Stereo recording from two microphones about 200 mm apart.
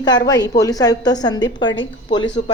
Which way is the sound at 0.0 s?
20° left (ahead or behind).